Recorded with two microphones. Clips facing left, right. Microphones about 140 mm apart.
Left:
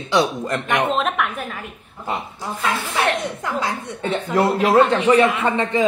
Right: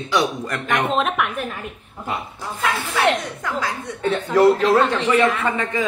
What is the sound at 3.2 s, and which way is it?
Speech, 25° left (ahead or behind).